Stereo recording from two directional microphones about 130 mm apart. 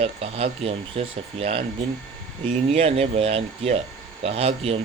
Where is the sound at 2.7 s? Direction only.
50° right (ahead or behind).